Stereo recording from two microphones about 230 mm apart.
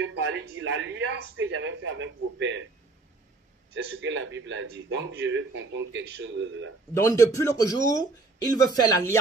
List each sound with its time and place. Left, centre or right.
0.0 s a man's voice: right
3.7 s a man's voice: right
6.9 s speech: centre